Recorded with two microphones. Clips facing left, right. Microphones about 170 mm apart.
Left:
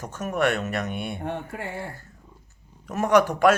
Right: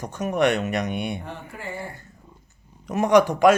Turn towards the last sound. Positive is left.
turn(degrees=-10)  # may be behind; listen again after turning